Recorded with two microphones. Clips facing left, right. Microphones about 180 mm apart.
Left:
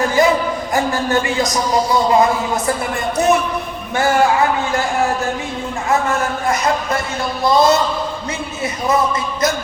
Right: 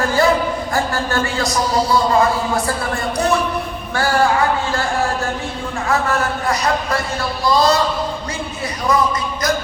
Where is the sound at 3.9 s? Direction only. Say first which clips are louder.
Left 2 dB; 20° left (ahead or behind).